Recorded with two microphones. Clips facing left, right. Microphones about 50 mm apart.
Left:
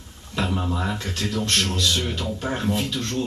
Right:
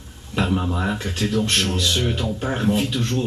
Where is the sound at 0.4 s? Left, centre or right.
Centre.